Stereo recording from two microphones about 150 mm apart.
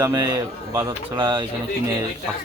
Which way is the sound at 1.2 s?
30° right (ahead or behind).